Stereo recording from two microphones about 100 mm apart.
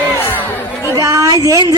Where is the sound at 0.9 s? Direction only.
35° right (ahead or behind).